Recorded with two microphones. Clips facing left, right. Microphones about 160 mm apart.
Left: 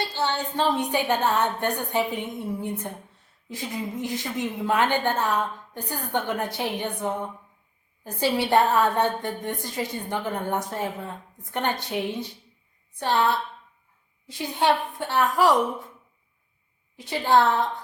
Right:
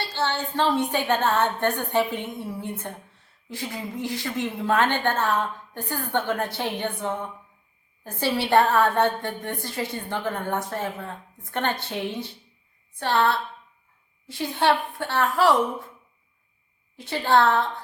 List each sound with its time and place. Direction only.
0.0 s a woman's voice: 15° left (ahead or behind)
17.0 s a woman's voice: 15° left (ahead or behind)